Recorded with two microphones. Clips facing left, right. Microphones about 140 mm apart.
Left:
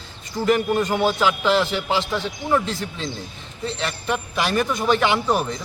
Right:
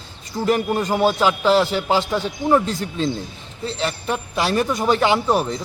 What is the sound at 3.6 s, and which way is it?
A man's voice, 35° right (ahead or behind).